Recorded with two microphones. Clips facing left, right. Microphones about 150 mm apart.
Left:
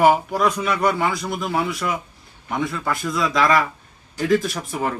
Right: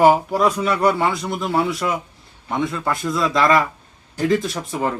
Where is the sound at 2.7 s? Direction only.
Centre (ahead or behind).